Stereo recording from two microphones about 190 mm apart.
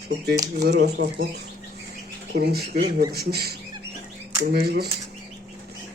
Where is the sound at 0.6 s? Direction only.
60° right (ahead or behind).